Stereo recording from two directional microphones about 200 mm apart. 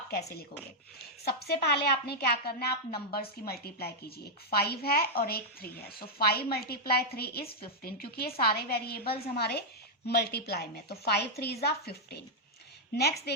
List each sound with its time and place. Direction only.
0.1 s a woman's voice: 50° left (ahead or behind)